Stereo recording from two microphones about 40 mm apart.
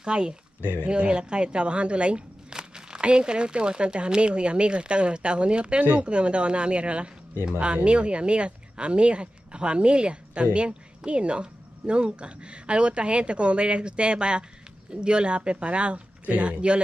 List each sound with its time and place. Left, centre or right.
0.0 s speech: right